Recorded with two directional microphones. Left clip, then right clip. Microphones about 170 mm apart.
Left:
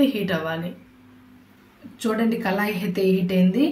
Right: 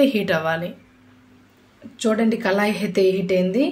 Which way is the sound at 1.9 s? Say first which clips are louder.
Right 3 dB; 45° right (ahead or behind).